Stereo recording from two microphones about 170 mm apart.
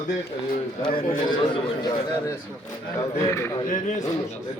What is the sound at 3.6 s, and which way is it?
Speech, 50° left (ahead or behind).